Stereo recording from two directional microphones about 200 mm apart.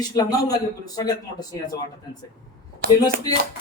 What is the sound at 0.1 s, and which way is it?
Speech, 20° left (ahead or behind).